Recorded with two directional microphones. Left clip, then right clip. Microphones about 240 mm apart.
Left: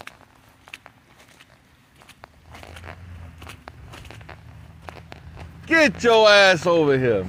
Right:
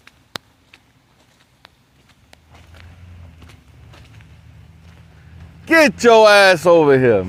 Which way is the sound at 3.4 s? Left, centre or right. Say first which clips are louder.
Left 11 dB; left.